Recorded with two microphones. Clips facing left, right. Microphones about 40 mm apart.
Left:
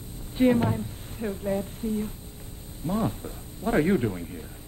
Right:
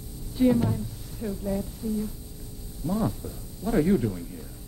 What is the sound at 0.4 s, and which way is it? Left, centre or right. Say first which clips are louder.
A man's voice: left 1 dB; left.